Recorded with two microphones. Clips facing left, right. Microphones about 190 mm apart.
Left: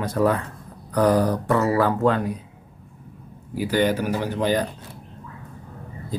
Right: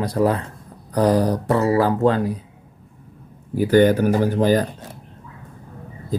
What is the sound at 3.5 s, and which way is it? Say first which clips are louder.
Speech: right 7 dB; 50° right (ahead or behind).